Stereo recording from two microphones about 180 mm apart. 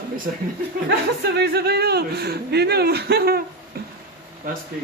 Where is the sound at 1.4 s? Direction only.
65° right (ahead or behind).